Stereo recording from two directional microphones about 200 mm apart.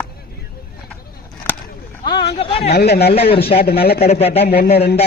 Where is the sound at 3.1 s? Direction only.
30° left (ahead or behind).